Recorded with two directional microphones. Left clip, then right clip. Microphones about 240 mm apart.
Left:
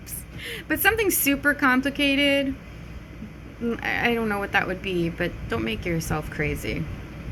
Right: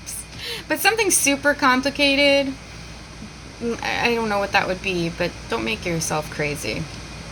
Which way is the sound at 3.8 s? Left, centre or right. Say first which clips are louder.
Right 3 dB; centre.